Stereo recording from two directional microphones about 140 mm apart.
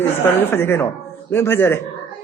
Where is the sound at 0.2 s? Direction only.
15° left (ahead or behind).